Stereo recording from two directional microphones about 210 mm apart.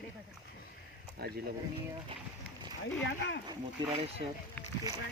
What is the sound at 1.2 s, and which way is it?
Speech, 45° right (ahead or behind).